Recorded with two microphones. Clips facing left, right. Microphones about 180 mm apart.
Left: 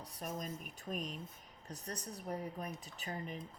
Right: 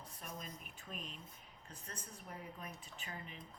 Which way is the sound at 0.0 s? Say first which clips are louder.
Left 7 dB; 40° left (ahead or behind).